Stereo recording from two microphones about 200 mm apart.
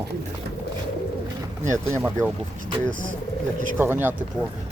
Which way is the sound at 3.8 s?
10° right (ahead or behind).